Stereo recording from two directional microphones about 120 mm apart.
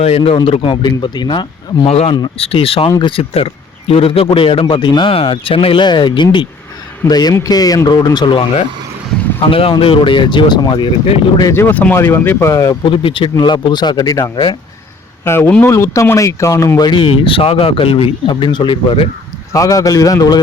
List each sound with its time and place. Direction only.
0.0 s speech: 55° left (ahead or behind); by 1.9 s 40° left (ahead or behind)
1.9 s speech: 60° left (ahead or behind); by 8.4 s 45° left (ahead or behind)
9.5 s speech: 50° left (ahead or behind)
11.5 s speech: 15° left (ahead or behind)
12.8 s speech: 45° left (ahead or behind)
15.2 s speech: 20° left (ahead or behind); by 19.0 s 45° left (ahead or behind)
19.5 s speech: 30° left (ahead or behind)